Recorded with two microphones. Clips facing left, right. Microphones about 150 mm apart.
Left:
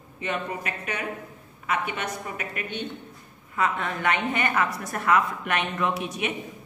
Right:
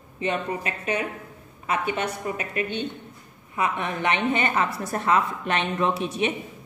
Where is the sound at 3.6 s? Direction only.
20° right (ahead or behind).